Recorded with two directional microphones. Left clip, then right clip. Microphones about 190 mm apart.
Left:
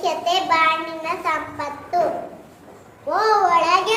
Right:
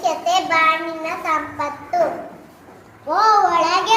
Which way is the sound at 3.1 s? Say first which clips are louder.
Right 2 dB; 20° left (ahead or behind).